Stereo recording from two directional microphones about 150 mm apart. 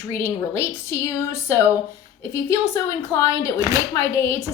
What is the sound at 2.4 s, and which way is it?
A woman's voice, 20° left (ahead or behind).